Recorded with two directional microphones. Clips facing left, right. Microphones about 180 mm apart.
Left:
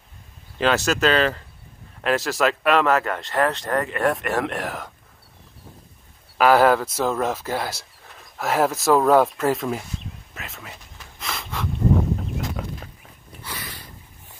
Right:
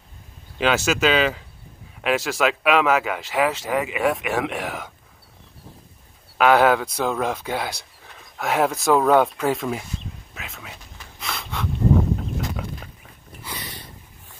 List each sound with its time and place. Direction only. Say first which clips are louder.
0.6 s speech: even; centre (ahead or behind)
6.3 s speech: even; centre (ahead or behind)
12.4 s fowl: even; centre (ahead or behind)
13.4 s snort: even; 20° right (ahead or behind)